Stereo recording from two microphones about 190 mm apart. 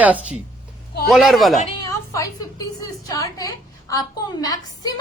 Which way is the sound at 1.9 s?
15° left (ahead or behind).